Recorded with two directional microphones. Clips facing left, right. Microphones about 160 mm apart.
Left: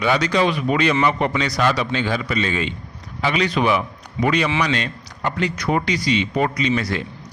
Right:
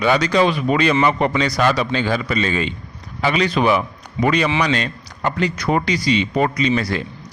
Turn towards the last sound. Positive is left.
turn(degrees=-35)  # may be behind; listen again after turning